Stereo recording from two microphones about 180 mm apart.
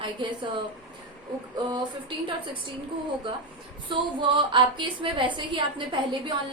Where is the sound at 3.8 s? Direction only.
25° right (ahead or behind).